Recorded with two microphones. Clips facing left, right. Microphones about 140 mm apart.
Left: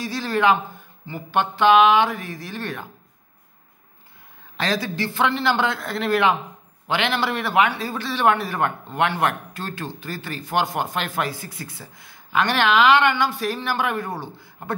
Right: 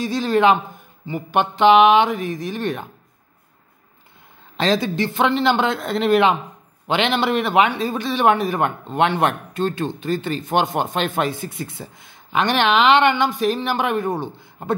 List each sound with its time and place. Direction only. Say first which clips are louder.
0.0 s speech: right 4 dB; 20° right (ahead or behind)
4.6 s speech: right 5 dB; 25° right (ahead or behind)